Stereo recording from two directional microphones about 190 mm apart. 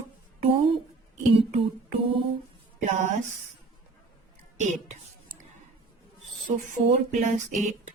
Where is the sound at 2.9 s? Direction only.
40° right (ahead or behind).